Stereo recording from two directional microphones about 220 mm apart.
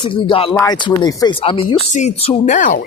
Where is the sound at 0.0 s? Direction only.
25° left (ahead or behind).